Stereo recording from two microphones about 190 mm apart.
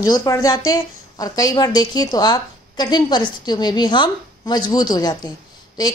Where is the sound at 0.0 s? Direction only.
20° left (ahead or behind).